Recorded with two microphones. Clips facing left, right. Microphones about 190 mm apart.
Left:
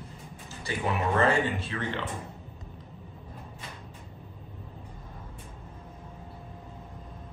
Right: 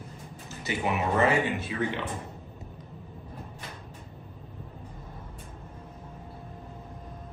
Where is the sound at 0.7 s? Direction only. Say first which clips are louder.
Right 1 dB; 20° right (ahead or behind).